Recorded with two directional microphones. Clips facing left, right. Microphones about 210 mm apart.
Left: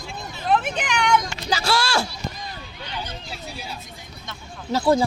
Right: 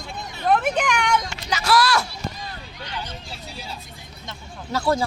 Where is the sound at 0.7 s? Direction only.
50° right (ahead or behind).